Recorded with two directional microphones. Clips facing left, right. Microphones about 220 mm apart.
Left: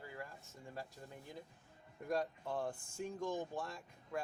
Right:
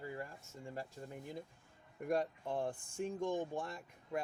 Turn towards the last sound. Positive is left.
turn(degrees=-20)  # may be behind; listen again after turning